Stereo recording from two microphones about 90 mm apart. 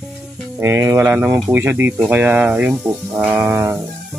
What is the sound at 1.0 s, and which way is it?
Speech, 20° right (ahead or behind).